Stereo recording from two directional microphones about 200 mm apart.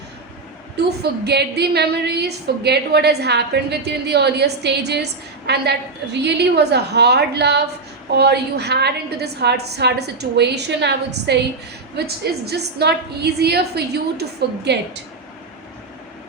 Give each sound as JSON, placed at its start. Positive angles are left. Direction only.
{"t": 0.8, "sound": "a woman's voice", "side_deg": -55}